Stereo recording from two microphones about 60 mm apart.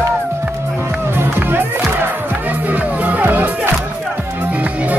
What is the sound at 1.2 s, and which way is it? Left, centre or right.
Music, right.